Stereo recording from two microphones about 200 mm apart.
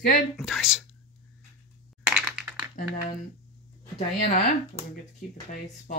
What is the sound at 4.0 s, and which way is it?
Speech, 30° left (ahead or behind).